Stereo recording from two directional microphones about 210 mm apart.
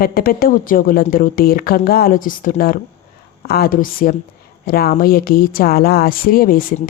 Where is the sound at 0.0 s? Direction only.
45° left (ahead or behind).